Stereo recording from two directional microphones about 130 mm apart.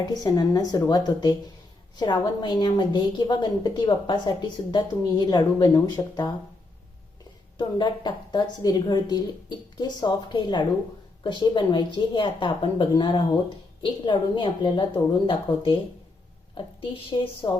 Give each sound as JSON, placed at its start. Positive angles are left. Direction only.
{"t": 0.1, "sound": "a woman's voice", "side_deg": 30}
{"t": 7.8, "sound": "a woman's voice", "side_deg": 35}